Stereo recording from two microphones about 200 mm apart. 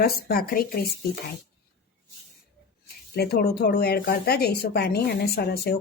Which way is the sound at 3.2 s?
55° left (ahead or behind).